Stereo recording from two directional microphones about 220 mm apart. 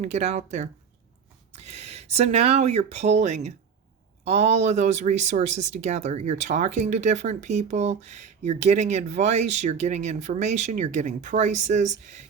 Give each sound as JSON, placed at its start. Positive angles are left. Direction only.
{"t": 0.0, "sound": "speech", "side_deg": -30}